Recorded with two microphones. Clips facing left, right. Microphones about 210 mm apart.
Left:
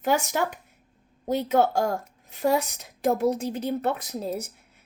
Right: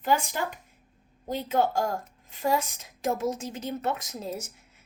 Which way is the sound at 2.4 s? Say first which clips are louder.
Left 3 dB; 65° left (ahead or behind).